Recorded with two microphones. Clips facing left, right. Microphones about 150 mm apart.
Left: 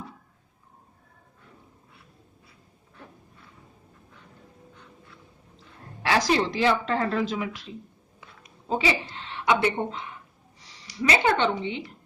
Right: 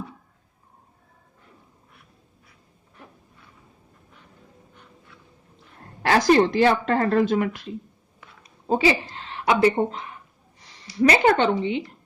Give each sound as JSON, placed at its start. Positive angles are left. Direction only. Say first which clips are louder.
{"t": 6.0, "sound": "a woman's voice", "louder": "right 6 dB", "side_deg": -50}
{"t": 8.4, "sound": "a sound", "louder": "right 5 dB", "side_deg": -40}
{"t": 10.7, "sound": "speech", "louder": "right 6 dB", "side_deg": -50}